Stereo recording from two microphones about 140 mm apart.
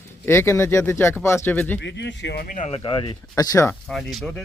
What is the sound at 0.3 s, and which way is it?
Speech, 20° left (ahead or behind).